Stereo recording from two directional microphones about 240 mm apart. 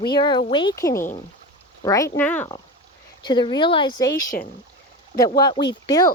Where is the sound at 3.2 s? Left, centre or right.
Centre.